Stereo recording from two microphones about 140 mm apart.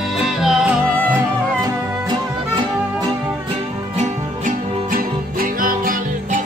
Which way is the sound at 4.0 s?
80° right.